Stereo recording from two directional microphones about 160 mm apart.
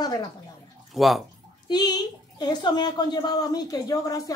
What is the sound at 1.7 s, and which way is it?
Speech, 25° left (ahead or behind).